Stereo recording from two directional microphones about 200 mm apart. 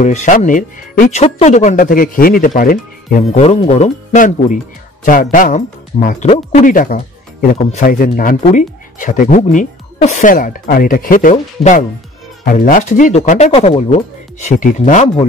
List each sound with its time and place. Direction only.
0.0 s speech: 35° left (ahead or behind)